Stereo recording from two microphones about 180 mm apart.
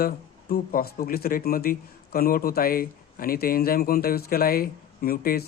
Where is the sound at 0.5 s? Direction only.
55° left (ahead or behind).